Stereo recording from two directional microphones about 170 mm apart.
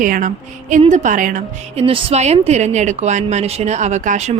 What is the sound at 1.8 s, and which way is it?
A woman's voice, 35° right (ahead or behind).